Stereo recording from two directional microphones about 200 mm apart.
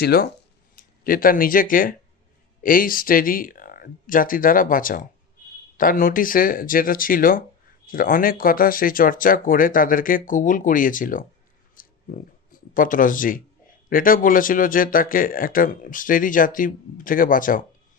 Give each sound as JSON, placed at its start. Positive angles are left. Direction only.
{"t": 0.0, "sound": "speech", "side_deg": 50}
{"t": 11.7, "sound": "a sound", "side_deg": 45}
{"t": 13.9, "sound": "speech", "side_deg": 45}